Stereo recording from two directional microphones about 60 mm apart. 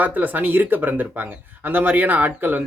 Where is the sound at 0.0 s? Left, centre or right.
Right.